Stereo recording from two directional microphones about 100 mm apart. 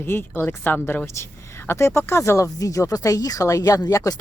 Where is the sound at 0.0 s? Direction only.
20° left (ahead or behind).